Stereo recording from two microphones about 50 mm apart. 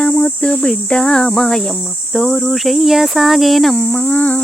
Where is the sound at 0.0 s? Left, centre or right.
Centre.